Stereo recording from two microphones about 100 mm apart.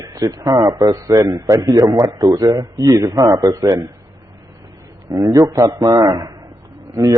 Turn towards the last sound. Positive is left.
turn(degrees=-35)  # may be behind; listen again after turning